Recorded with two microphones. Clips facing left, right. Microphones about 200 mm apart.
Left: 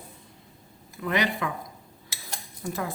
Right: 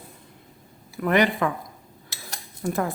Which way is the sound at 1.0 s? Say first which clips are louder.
Right 6 dB; 55° right (ahead or behind).